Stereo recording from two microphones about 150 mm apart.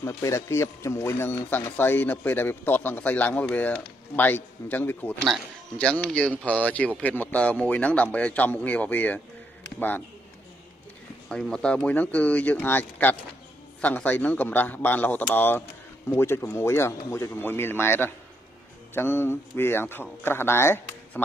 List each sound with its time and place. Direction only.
0.0 s a man's voice: 20° left (ahead or behind)
11.2 s speech: 5° left (ahead or behind)